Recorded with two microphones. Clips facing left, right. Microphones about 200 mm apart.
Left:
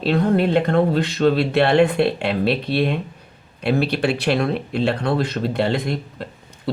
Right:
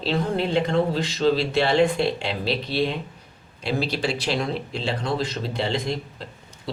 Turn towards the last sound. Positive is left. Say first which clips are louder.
# left 7 dB
turn(degrees=55)  # may be behind; listen again after turning